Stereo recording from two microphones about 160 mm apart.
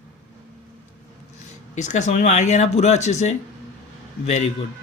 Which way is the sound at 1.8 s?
50° left (ahead or behind).